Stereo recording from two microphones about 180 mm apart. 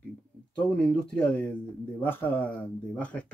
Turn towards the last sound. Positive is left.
turn(degrees=5)  # may be behind; listen again after turning